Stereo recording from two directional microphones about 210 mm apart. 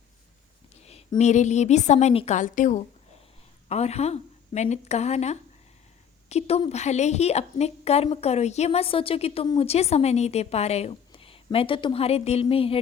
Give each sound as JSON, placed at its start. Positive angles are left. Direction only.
{"t": 0.9, "sound": "a woman's voice", "side_deg": 30}